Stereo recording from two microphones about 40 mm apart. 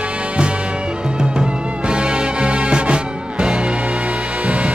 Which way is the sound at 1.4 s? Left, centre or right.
Right.